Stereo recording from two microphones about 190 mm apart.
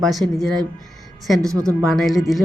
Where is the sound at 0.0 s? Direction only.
Centre (ahead or behind).